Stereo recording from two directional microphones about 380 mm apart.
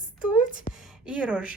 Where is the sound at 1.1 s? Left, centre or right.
Centre.